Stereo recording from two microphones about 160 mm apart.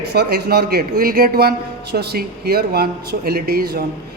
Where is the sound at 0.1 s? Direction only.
90° right; by 3.8 s 70° right (ahead or behind).